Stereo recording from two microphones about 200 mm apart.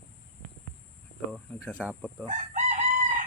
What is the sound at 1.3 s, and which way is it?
Speech, 5° left (ahead or behind).